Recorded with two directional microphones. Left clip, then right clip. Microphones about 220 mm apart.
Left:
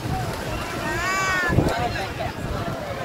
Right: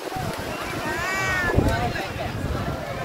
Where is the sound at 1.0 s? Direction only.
35° left (ahead or behind).